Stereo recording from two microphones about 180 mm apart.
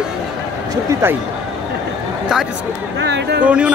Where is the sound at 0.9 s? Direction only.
15° right (ahead or behind).